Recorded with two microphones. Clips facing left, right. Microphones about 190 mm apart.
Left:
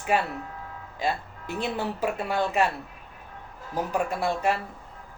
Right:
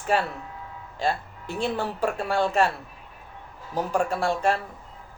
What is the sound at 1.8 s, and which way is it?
Speech, 10° left (ahead or behind).